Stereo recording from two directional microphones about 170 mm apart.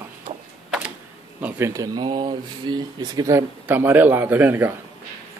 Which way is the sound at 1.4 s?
15° right (ahead or behind).